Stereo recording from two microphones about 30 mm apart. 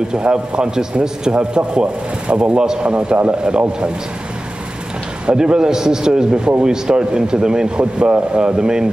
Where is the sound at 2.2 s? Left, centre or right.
Right.